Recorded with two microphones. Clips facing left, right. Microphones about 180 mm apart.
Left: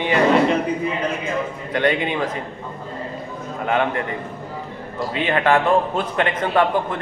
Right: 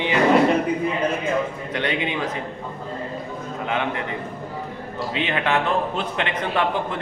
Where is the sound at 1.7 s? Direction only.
50° left (ahead or behind).